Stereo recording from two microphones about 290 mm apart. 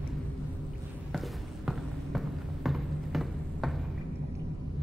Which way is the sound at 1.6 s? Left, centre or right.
Centre.